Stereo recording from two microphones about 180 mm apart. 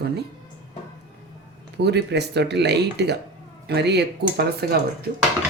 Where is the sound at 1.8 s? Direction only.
70° right (ahead or behind).